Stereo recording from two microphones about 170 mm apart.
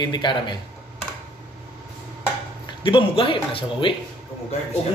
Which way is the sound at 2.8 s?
30° left (ahead or behind).